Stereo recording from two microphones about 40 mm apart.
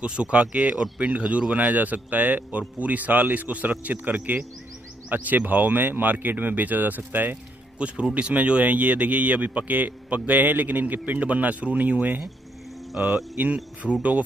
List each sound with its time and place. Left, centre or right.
0.2 s speech: right
7.0 s speech: right
7.8 s speech: right
13.8 s speech: centre